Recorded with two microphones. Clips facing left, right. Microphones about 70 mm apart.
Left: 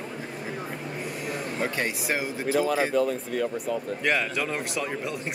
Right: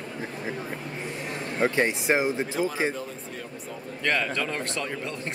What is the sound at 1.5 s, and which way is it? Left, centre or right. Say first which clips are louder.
Speech: right 7 dB; right.